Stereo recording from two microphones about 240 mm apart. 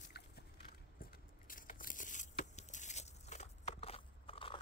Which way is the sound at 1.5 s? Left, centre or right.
Left.